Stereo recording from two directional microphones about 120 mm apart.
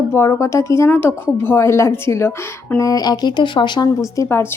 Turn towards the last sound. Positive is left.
turn(degrees=25)  # may be behind; listen again after turning